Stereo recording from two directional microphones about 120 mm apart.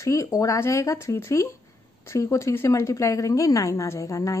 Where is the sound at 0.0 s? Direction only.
25° left (ahead or behind).